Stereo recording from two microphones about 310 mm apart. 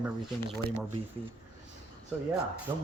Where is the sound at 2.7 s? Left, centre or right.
Centre.